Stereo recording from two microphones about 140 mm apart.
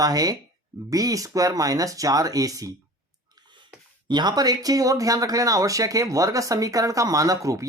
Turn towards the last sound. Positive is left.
turn(degrees=-20)  # may be behind; listen again after turning